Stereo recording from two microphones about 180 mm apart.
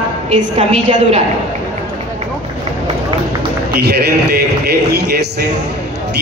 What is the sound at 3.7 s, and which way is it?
Music, 60° right (ahead or behind).